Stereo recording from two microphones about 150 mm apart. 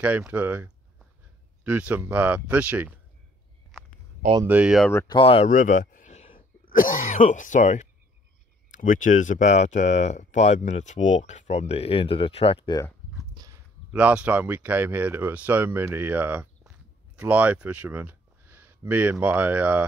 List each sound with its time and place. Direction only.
0.0 s speech: 10° right (ahead or behind)
4.5 s speech: 5° right (ahead or behind)
4.9 s speech: 30° left (ahead or behind)
5.5 s a sound: 55° left (ahead or behind)
6.6 s speech: 65° left (ahead or behind); by 12.7 s 40° left (ahead or behind)
13.9 s speech: 10° right (ahead or behind)